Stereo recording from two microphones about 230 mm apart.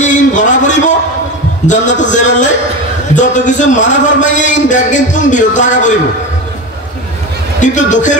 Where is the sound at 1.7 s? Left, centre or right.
Left.